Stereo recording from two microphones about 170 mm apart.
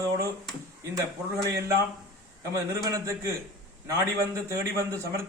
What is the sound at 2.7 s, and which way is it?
Speech, 20° right (ahead or behind).